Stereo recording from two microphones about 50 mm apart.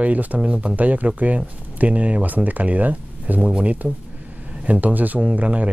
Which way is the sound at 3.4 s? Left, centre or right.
Right.